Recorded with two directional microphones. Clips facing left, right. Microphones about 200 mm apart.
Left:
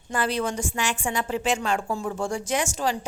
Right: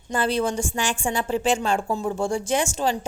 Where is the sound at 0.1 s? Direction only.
30° right (ahead or behind).